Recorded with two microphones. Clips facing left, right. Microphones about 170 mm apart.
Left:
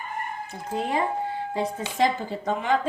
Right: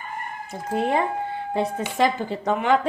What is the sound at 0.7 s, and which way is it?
Speech, 60° right (ahead or behind).